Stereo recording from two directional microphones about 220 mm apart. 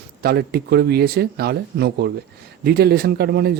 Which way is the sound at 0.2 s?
45° right (ahead or behind).